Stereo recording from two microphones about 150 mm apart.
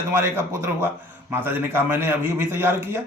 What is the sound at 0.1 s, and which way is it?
A man's voice, 15° right (ahead or behind).